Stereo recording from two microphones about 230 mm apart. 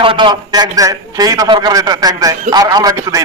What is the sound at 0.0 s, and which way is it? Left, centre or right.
A man's voice, right.